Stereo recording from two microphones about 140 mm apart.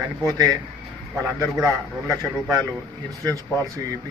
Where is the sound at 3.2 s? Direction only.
25° right (ahead or behind).